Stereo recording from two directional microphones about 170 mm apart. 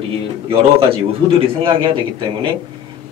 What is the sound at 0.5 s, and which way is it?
A man's voice, 35° right (ahead or behind).